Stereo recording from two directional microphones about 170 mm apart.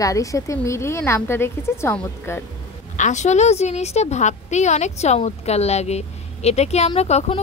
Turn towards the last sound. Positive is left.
turn(degrees=40)  # may be behind; listen again after turning